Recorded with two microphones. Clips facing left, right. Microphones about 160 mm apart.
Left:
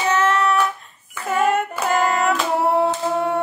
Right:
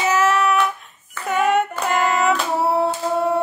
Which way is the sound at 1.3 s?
Centre (ahead or behind).